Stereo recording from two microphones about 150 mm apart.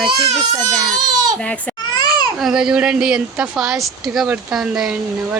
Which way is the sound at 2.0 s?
25° left (ahead or behind).